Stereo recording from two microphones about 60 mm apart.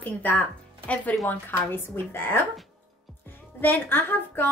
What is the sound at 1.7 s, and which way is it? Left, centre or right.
Speech, left.